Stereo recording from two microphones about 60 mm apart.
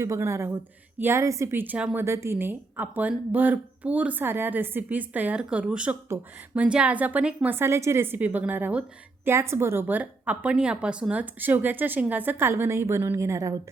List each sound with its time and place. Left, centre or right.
0.0 s a woman's voice: right
0.5 s a woman's voice: right
1.1 s speech: right
1.5 s a woman's voice: right
2.0 s a woman's voice: right
2.5 s speech: right
5.4 s speech: centre
7.5 s a woman's voice: right
9.2 s a woman's voice: right
9.8 s speech: right
11.1 s a woman's voice: right
12.5 s a woman's voice: right
13.1 s speech: right